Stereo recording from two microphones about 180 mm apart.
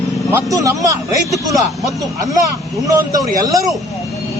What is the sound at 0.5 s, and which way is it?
Speech, 20° right (ahead or behind).